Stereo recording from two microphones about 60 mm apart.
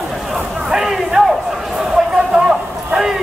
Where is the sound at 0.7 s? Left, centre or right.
Centre.